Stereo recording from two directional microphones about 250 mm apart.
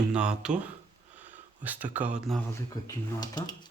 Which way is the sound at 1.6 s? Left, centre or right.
Centre.